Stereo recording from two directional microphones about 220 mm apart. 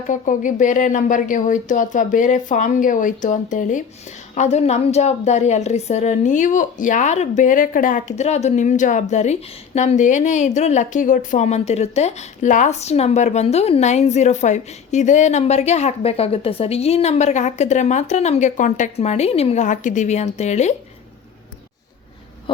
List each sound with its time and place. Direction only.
0.1 s a woman's voice: 35° left (ahead or behind)
22.5 s owl: 25° left (ahead or behind)